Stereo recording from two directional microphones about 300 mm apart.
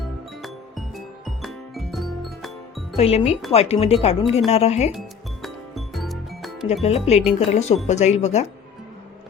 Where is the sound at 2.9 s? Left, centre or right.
Centre.